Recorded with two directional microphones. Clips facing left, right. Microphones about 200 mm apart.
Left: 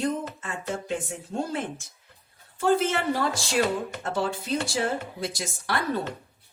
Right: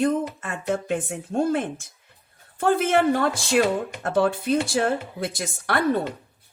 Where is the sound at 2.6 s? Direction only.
55° right (ahead or behind).